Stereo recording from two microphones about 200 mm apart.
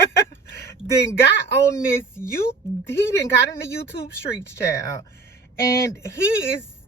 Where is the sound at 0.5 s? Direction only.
15° left (ahead or behind).